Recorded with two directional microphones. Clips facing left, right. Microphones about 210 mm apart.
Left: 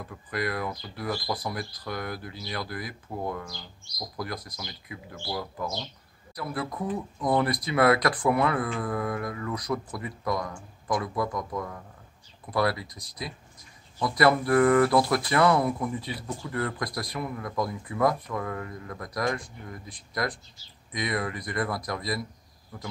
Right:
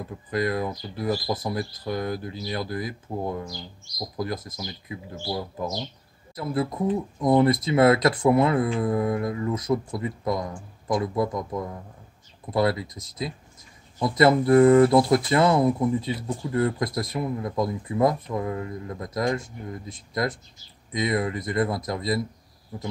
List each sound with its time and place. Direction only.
0.1 s speech: 20° right (ahead or behind)
4.5 s speech: 20° right (ahead or behind)
6.3 s speech: 25° right (ahead or behind)